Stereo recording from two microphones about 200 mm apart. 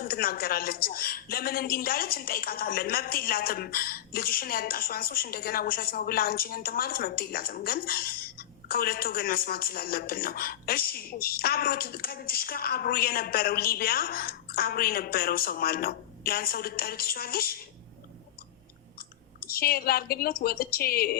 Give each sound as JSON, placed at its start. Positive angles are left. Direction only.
{"t": 0.0, "sound": "a woman's voice", "side_deg": 50}
{"t": 19.4, "sound": "a woman's voice", "side_deg": 50}